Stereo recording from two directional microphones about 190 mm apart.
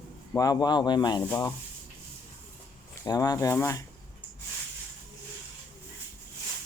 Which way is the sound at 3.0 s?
20° left (ahead or behind).